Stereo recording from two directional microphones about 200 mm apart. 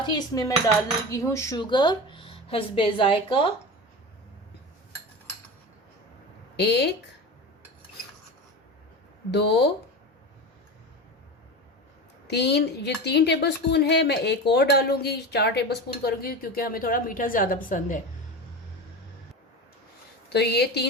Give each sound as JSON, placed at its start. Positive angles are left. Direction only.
{"t": 0.0, "sound": "a woman's voice", "side_deg": 20}
{"t": 6.6, "sound": "a woman's voice", "side_deg": 55}
{"t": 9.3, "sound": "a woman's voice", "side_deg": 55}
{"t": 12.3, "sound": "a woman's voice", "side_deg": 55}
{"t": 20.3, "sound": "a woman's voice", "side_deg": 55}